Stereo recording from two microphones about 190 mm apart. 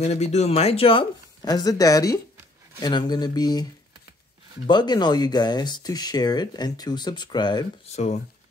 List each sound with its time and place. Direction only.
0.0 s speech: 35° left (ahead or behind)
4.6 s speech: 25° left (ahead or behind)
7.9 s speech: 35° left (ahead or behind)